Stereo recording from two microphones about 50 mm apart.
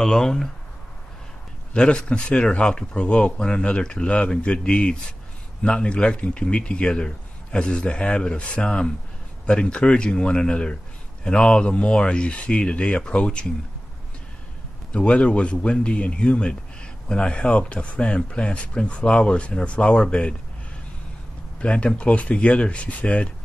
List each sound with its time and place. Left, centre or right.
0.0 s speech: centre
1.7 s speech: centre
14.9 s speech: left
21.5 s speech: left